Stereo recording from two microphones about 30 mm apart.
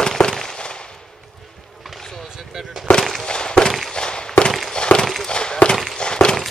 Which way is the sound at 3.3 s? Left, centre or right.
Left.